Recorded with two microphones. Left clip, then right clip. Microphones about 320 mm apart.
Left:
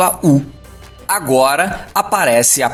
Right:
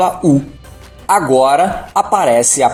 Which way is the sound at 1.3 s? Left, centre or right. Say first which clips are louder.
Left 1 dB; left.